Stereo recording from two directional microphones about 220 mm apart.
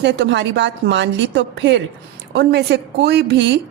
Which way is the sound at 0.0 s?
55° right (ahead or behind).